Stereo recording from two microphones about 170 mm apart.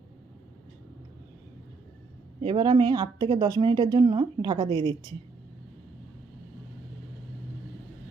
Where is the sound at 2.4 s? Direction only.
30° right (ahead or behind).